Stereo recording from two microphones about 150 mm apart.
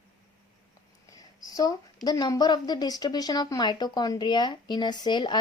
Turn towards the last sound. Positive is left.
turn(degrees=30)  # may be behind; listen again after turning